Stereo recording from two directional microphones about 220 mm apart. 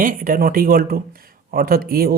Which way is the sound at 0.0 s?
40° right (ahead or behind).